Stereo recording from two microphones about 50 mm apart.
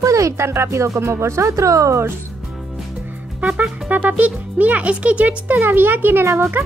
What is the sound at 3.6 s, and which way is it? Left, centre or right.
Speech, right.